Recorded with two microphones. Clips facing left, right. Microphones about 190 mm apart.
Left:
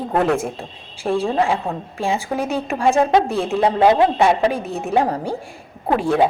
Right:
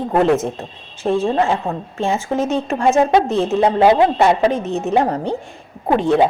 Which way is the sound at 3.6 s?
5° right (ahead or behind).